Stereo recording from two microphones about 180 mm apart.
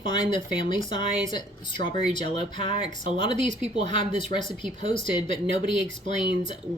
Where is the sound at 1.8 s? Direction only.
60° right (ahead or behind).